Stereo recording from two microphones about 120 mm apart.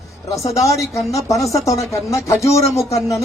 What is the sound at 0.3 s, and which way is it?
Speech, 25° left (ahead or behind).